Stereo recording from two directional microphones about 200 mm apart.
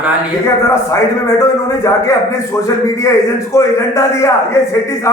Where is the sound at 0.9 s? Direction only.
15° left (ahead or behind).